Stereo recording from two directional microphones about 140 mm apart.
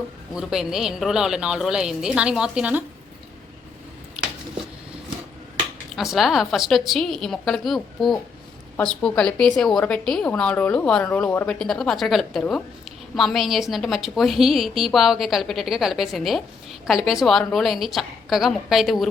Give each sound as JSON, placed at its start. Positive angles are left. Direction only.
{"t": 0.3, "sound": "a woman's voice", "side_deg": -5}
{"t": 6.0, "sound": "a woman's voice", "side_deg": 0}